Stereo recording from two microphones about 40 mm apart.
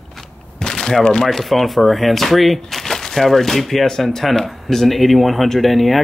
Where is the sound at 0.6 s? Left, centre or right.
Centre.